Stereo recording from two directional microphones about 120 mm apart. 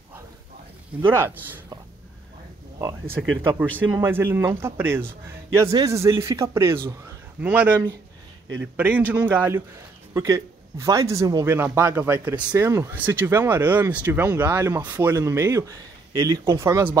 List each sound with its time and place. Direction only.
1.1 s speech: 20° right (ahead or behind)
3.2 s speech: 15° right (ahead or behind)
7.4 s speech: 10° right (ahead or behind)
10.1 s speech: 30° right (ahead or behind)